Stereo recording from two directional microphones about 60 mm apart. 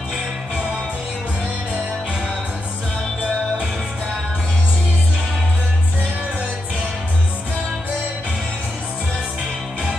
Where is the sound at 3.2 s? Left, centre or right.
Centre.